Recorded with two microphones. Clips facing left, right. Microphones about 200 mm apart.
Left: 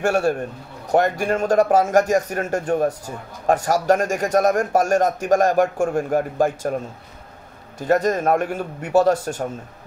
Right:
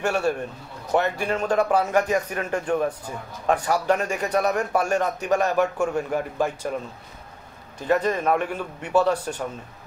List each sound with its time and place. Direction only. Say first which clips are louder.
0.0 s a man's voice: left 4 dB; 45° left (ahead or behind)
7.8 s a man's voice: left 3 dB; 45° left (ahead or behind)